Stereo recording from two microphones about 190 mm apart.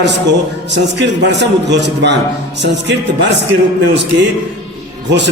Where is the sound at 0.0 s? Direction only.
65° right (ahead or behind).